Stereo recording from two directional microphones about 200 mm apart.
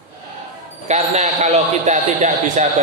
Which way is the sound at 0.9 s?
35° right (ahead or behind).